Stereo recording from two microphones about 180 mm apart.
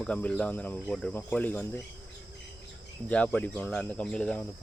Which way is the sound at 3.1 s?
5° left (ahead or behind).